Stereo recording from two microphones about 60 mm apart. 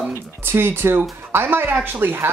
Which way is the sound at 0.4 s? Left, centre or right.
Right.